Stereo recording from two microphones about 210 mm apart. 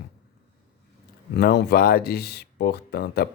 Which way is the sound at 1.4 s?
50° left (ahead or behind).